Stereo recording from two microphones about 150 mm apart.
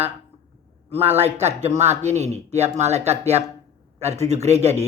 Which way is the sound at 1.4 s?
45° right (ahead or behind).